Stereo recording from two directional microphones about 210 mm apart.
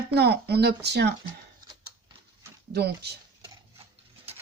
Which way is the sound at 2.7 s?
50° right (ahead or behind).